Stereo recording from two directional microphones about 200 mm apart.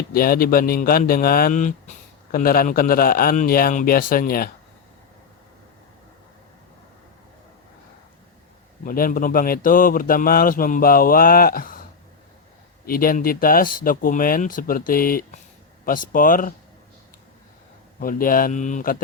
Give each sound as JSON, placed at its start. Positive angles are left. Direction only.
{"t": 0.1, "sound": "a man's voice", "side_deg": 45}
{"t": 8.8, "sound": "a man's voice", "side_deg": 45}
{"t": 18.0, "sound": "a man's voice", "side_deg": 45}